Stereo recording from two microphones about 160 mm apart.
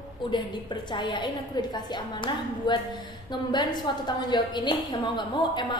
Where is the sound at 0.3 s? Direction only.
30° left (ahead or behind).